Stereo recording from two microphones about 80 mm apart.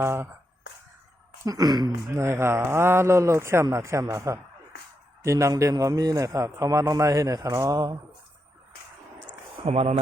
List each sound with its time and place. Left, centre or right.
0.0 s speech: right
1.5 s a man's voice: right
2.0 s a man's voice: right